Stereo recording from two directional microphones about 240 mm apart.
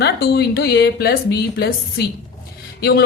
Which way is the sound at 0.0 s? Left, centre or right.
Left.